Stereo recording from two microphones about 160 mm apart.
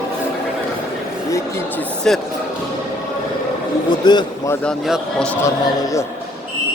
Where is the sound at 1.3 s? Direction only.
15° left (ahead or behind).